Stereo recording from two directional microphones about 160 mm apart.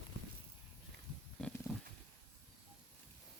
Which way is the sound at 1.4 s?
5° left (ahead or behind).